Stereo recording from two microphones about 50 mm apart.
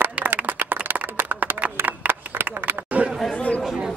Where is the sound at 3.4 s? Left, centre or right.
Left.